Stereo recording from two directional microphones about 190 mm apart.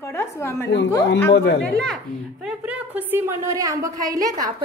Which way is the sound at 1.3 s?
60° left (ahead or behind).